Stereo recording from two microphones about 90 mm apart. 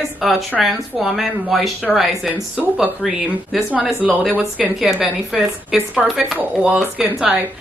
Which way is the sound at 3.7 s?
15° right (ahead or behind).